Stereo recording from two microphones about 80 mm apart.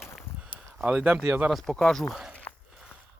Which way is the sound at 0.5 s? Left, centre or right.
Centre.